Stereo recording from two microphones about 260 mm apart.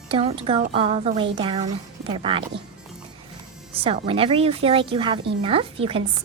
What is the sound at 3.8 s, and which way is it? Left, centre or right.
A woman's voice, right.